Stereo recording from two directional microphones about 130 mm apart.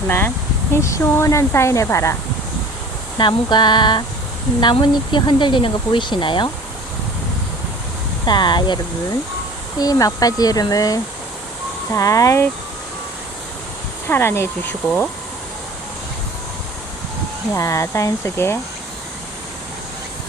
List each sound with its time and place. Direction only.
0.7 s speech: 20° left (ahead or behind)
3.2 s speech: 35° left (ahead or behind)
8.2 s speech: 35° left (ahead or behind)
14.1 s speech: 20° left (ahead or behind)
17.5 s speech: 25° left (ahead or behind)